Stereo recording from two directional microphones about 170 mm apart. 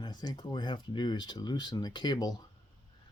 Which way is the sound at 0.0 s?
25° left (ahead or behind).